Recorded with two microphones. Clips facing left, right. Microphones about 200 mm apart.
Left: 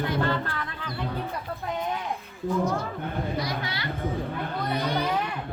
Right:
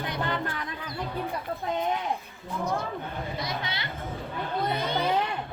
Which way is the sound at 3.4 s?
25° right (ahead or behind).